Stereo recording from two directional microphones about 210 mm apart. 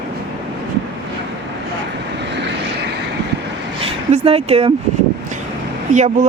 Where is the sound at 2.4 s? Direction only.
55° right (ahead or behind).